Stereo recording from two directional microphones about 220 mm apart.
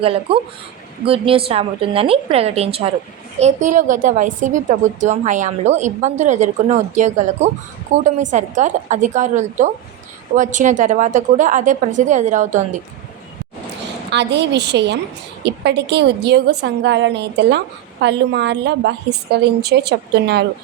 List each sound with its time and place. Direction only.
0.0 s a woman's voice: 25° right (ahead or behind)
14.1 s a woman's voice: 50° right (ahead or behind)